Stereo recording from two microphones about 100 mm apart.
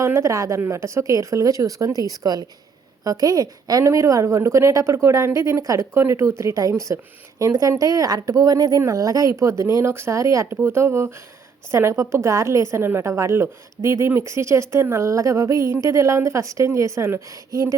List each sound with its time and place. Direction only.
0.0 s a woman's voice: 30° right (ahead or behind)